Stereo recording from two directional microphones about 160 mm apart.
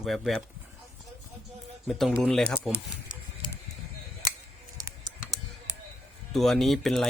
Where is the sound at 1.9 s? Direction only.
Centre (ahead or behind).